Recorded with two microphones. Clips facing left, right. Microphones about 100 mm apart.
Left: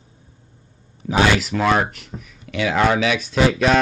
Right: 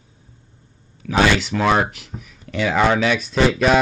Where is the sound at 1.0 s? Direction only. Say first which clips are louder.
Even; 25° left (ahead or behind).